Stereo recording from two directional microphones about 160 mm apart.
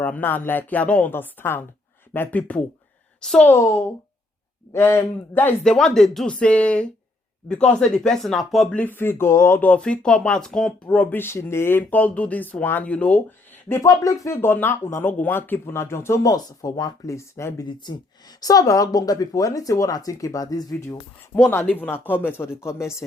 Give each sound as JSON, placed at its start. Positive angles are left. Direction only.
{"t": 0.0, "sound": "a woman's voice", "side_deg": 10}
{"t": 3.5, "sound": "speech", "side_deg": 20}